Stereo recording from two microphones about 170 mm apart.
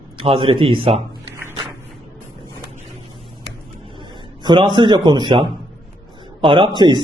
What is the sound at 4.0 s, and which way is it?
A man's voice, 25° right (ahead or behind).